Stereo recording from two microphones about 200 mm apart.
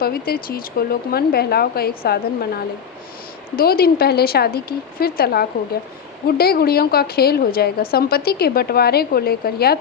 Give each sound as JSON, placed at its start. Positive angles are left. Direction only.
{"t": 0.0, "sound": "a woman's voice", "side_deg": 50}
{"t": 3.5, "sound": "a woman's voice", "side_deg": 50}